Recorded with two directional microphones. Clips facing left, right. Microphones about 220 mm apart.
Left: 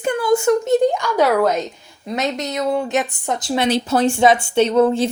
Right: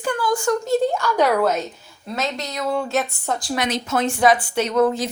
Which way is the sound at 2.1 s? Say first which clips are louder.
Left 4 dB; 20° left (ahead or behind).